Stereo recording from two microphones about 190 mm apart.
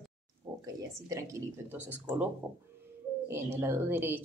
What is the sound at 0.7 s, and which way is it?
Speech, 15° right (ahead or behind).